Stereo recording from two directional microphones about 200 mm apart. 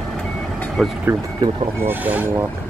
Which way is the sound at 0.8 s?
Centre (ahead or behind).